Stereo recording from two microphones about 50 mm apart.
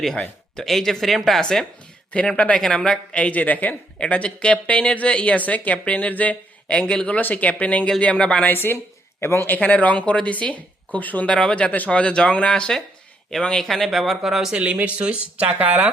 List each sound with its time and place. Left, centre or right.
0.0 s speech: centre
2.2 s a woman's voice: left
3.2 s a woman's voice: left
3.9 s a woman's voice: left
7.2 s a woman's voice: left
8.4 s a woman's voice: left
9.2 s speech: left
9.5 s a woman's voice: left
11.3 s a woman's voice: left
13.7 s speech: centre
14.5 s speech: right